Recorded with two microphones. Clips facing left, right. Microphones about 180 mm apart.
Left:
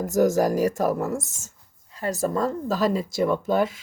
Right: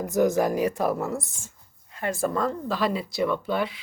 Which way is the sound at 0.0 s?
40° left (ahead or behind).